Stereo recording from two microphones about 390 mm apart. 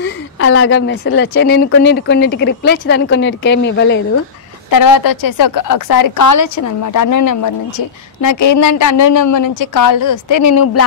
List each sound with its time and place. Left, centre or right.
0.0 s a woman's voice: left
4.6 s a woman's voice: left